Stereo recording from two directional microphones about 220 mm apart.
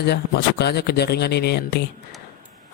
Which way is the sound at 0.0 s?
50° left (ahead or behind).